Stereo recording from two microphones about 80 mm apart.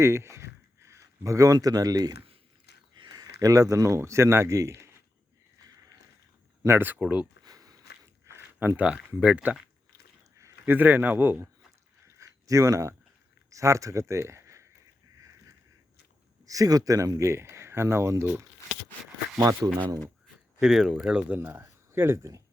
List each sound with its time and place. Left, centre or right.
0.0 s a sound: right
1.5 s speech: right
3.0 s speech: right
6.7 s a man's voice: right
7.4 s a sound: right
8.3 s a sound: right
9.2 s speech: centre
10.7 s a man's voice: right
12.1 s a sound: right
13.5 s speech: right
16.5 s speech: right
19.6 s speech: right
20.2 s speech: centre; by 22.3 s right